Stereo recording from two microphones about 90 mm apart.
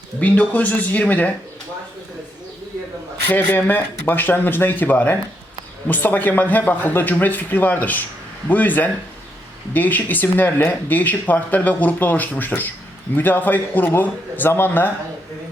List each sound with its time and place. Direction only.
0.2 s speech: 15° left (ahead or behind)
3.2 s speech: 20° left (ahead or behind)